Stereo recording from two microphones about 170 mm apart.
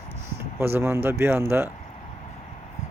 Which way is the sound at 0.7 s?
15° right (ahead or behind).